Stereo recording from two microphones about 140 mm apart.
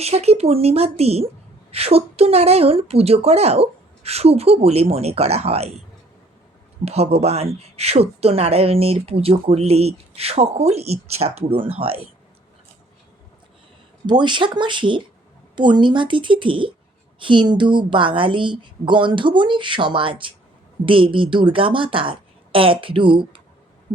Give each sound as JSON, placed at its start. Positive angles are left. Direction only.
{"t": 0.0, "sound": "speech", "side_deg": -50}
{"t": 6.8, "sound": "speech", "side_deg": -50}
{"t": 14.1, "sound": "speech", "side_deg": -35}